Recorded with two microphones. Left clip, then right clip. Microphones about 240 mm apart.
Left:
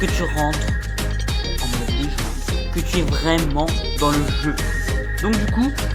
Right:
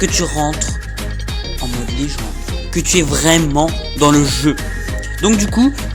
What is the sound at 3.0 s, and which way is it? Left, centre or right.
Speech, right.